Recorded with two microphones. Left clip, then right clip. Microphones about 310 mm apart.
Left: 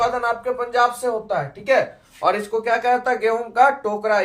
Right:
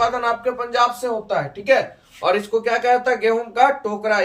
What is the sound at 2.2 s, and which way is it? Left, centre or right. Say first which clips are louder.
Speech: right 1 dB; centre.